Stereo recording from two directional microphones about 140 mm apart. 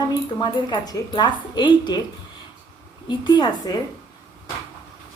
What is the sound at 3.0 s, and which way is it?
Speech, 30° left (ahead or behind).